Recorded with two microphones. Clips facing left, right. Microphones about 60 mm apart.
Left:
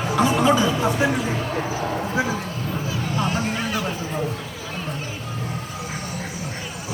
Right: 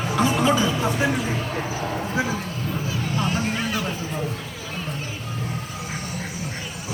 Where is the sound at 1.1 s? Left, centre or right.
Left.